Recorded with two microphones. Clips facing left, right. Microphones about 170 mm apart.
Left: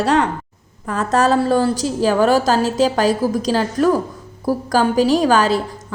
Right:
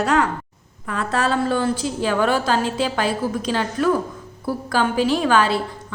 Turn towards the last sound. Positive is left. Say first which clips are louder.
# left 3 dB
turn(degrees=40)  # may be behind; listen again after turning